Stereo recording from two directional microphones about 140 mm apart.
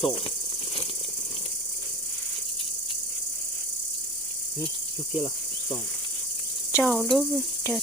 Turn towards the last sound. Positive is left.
turn(degrees=0)  # may be behind; listen again after turning